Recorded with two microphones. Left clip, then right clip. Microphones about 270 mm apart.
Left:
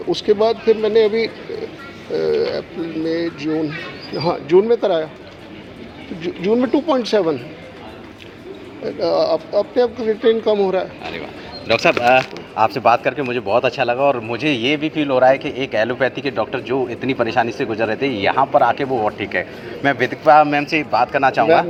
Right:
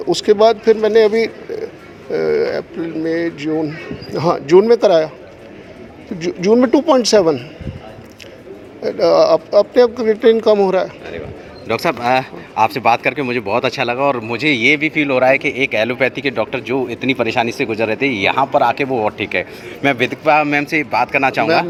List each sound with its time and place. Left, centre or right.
0.1 s speech: right
6.1 s speech: right
8.8 s speech: right
11.7 s speech: right